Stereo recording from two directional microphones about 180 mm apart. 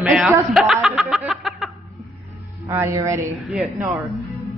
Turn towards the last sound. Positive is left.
turn(degrees=-10)  # may be behind; listen again after turning